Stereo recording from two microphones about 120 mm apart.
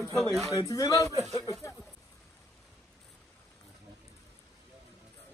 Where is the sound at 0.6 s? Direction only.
30° left (ahead or behind).